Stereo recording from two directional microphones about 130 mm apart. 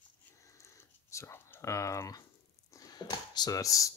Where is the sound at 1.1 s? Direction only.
20° left (ahead or behind).